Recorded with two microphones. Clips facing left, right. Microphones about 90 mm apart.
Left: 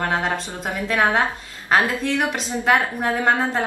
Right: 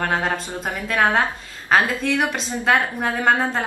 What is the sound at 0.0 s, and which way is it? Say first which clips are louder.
A woman's voice: even; 5° left (ahead or behind).